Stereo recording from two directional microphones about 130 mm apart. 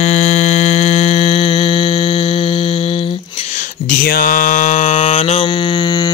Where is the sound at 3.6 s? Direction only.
90° left; by 5.5 s 55° left (ahead or behind).